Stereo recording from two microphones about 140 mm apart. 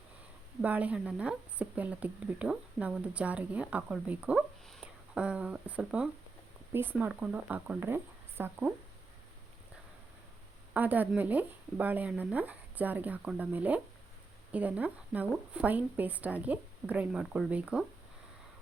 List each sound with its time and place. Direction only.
0.6 s a woman's voice: 10° right (ahead or behind)
4.4 s a woman's voice: centre (ahead or behind); by 8.7 s 15° right (ahead or behind)
10.8 s a woman's voice: 10° right (ahead or behind)